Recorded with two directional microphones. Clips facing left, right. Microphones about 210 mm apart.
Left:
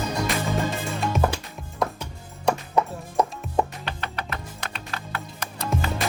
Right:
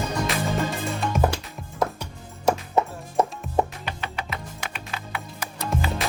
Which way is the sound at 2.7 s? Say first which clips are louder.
Even; 25° right (ahead or behind).